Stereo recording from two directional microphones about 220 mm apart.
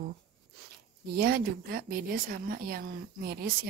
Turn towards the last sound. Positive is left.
turn(degrees=-45)  # may be behind; listen again after turning